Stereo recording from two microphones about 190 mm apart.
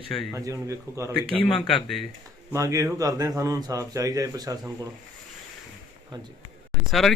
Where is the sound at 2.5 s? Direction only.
15° right (ahead or behind).